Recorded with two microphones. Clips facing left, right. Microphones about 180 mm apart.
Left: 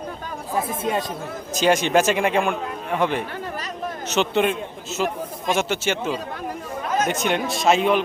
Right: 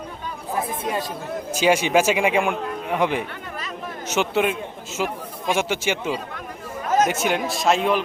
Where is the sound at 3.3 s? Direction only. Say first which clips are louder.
Left 4 dB; 40° left (ahead or behind).